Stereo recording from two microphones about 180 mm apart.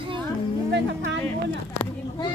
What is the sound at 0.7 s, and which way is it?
Speech, 90° right.